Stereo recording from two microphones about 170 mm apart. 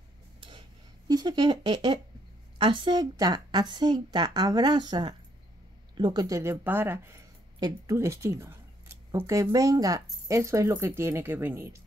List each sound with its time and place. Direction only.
1.0 s a woman's voice: 25° right (ahead or behind)